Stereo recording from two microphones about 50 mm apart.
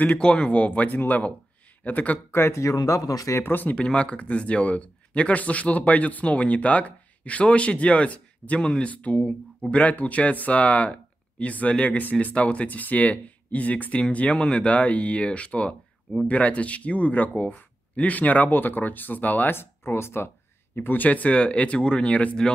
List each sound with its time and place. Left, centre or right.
0.0 s speech: left
2.3 s speech: left
3.4 s speech: left
3.7 s speech: centre
8.9 s speech: left
19.5 s speech: left
20.7 s speech: left